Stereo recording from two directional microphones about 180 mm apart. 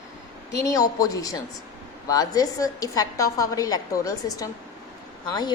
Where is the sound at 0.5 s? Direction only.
20° left (ahead or behind).